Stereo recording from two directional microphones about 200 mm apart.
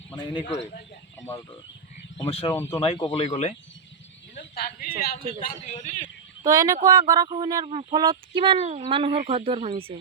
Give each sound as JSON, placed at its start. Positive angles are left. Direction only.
{"t": 0.2, "sound": "speech", "side_deg": 25}
{"t": 2.3, "sound": "a man's voice", "side_deg": 30}
{"t": 4.4, "sound": "speech", "side_deg": 45}
{"t": 5.4, "sound": "a man's voice", "side_deg": 35}
{"t": 6.4, "sound": "speech", "side_deg": -15}